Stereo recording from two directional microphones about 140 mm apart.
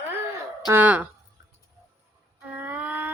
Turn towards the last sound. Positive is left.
turn(degrees=-10)  # may be behind; listen again after turning